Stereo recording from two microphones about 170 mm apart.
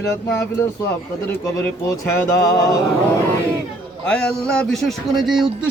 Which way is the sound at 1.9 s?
20° left (ahead or behind).